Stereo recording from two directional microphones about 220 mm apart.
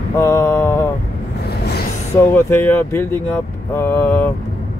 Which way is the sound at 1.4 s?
45° left (ahead or behind).